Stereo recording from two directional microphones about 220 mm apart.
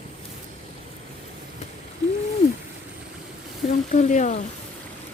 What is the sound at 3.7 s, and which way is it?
Speech, 35° left (ahead or behind).